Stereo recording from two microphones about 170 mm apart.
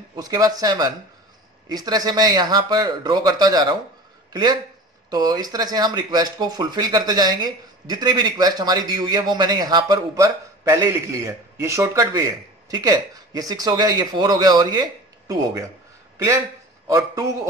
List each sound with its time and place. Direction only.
0.1 s speech: 25° right (ahead or behind)
16.8 s a man's voice: 20° right (ahead or behind)